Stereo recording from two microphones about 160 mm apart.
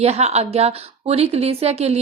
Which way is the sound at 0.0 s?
40° right (ahead or behind).